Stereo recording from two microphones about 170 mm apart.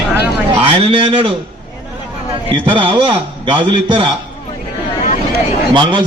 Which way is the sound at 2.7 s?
30° right (ahead or behind).